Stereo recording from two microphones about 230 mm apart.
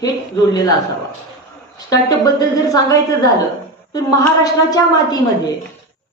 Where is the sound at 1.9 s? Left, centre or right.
Centre.